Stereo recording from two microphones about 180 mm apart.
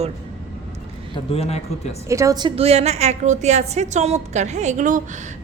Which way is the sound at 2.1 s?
15° right (ahead or behind).